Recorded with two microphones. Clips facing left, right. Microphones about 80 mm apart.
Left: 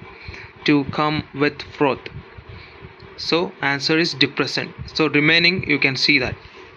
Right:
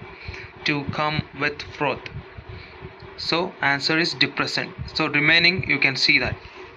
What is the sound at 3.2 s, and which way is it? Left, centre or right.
Speech, right.